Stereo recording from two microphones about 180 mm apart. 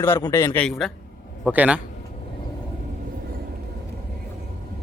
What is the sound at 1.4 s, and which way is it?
Speech, 10° right (ahead or behind).